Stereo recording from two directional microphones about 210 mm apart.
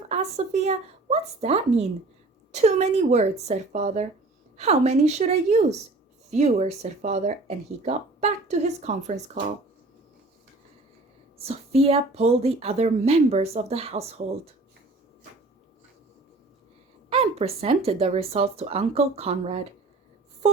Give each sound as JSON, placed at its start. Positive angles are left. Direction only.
{"t": 0.1, "sound": "speech", "side_deg": -30}
{"t": 11.4, "sound": "speech", "side_deg": -30}
{"t": 17.1, "sound": "speech", "side_deg": -30}